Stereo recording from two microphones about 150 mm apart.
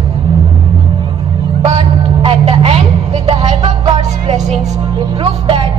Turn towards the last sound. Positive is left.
turn(degrees=-35)  # may be behind; listen again after turning